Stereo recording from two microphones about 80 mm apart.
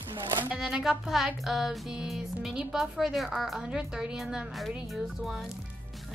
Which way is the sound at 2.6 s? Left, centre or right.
Centre.